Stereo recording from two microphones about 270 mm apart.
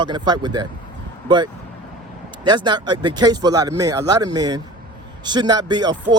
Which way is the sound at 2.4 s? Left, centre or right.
Centre.